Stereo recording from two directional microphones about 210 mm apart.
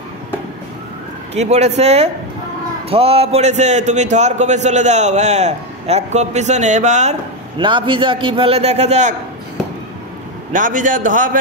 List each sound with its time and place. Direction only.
1.3 s a man's voice: 30° right (ahead or behind)
10.5 s a man's voice: 40° right (ahead or behind)